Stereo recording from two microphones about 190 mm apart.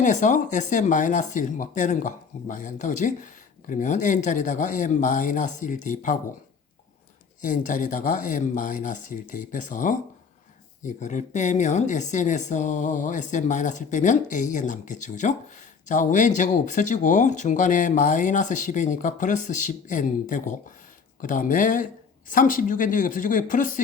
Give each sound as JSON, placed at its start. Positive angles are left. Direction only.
{"t": 0.0, "sound": "speech", "side_deg": 40}
{"t": 7.4, "sound": "speech", "side_deg": 45}